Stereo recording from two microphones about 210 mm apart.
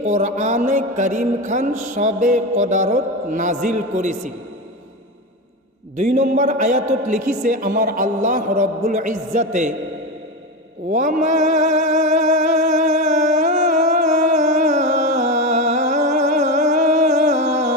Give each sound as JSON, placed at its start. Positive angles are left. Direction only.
{"t": 0.0, "sound": "a man's voice", "side_deg": -35}
{"t": 6.0, "sound": "a man's voice", "side_deg": -35}
{"t": 10.9, "sound": "a sound", "side_deg": -35}